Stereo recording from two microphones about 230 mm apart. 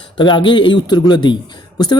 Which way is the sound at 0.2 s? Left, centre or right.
Left.